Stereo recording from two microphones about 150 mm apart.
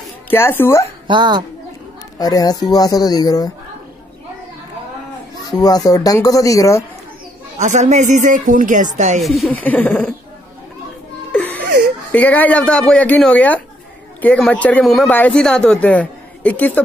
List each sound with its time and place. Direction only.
0.3 s a woman's voice: 15° left (ahead or behind)
1.0 s speech: 30° right (ahead or behind)
2.1 s speech: 25° left (ahead or behind)
5.5 s speech: 25° left (ahead or behind)
7.5 s speech: 50° right (ahead or behind)
9.2 s speech: centre (ahead or behind)
9.5 s a woman's voice: 10° left (ahead or behind)
11.3 s laughter: 10° left (ahead or behind)
12.1 s a woman's voice: 10° left (ahead or behind)